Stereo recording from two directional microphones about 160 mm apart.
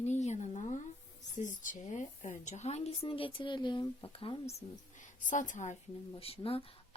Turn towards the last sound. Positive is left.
turn(degrees=35)  # may be behind; listen again after turning